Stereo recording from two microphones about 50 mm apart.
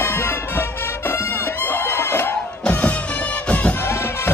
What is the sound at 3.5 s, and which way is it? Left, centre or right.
Music, left.